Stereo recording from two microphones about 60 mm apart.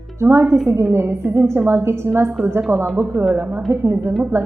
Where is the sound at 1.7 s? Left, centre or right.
Right.